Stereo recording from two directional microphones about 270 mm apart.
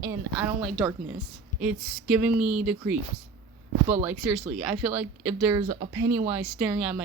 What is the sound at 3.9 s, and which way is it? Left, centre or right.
Speech, centre.